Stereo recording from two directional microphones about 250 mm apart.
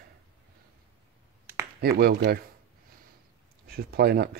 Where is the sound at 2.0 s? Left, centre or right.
Right.